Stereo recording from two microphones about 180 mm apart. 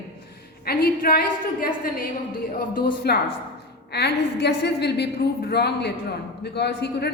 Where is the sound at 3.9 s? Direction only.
65° left (ahead or behind).